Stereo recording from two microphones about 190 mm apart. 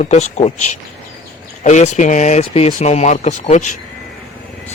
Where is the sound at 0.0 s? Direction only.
35° left (ahead or behind).